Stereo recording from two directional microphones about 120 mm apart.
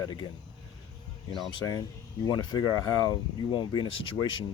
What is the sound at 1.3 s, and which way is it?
Speech, 35° left (ahead or behind).